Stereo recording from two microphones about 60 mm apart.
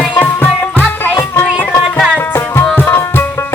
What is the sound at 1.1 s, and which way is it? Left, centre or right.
Music, left.